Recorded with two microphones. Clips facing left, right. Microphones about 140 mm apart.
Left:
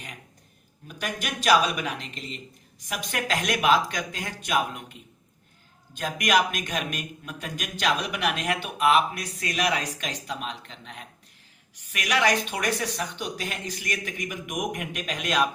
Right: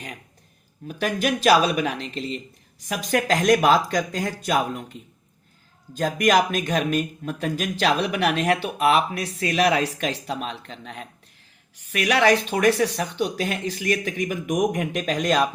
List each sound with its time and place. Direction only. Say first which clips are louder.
0.9 s a man's voice: right 9 dB; 35° right (ahead or behind)
6.0 s a man's voice: right 5 dB; 35° right (ahead or behind)